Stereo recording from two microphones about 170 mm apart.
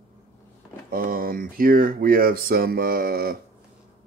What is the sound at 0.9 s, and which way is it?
Speech, 60° right (ahead or behind).